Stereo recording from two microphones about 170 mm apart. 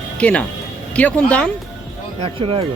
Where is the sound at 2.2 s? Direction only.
30° right (ahead or behind).